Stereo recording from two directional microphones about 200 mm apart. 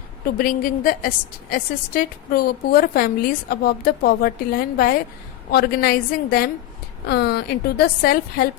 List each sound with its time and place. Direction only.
0.3 s a woman's voice: 45° left (ahead or behind)